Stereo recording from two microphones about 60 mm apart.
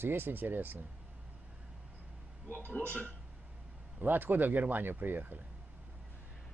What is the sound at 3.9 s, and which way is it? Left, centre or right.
Speech, right.